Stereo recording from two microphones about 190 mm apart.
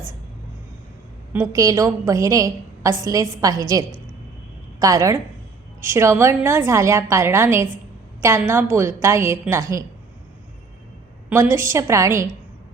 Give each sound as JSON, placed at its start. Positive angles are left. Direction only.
{"t": 1.3, "sound": "a woman's voice", "side_deg": -15}
{"t": 11.3, "sound": "a woman's voice", "side_deg": -15}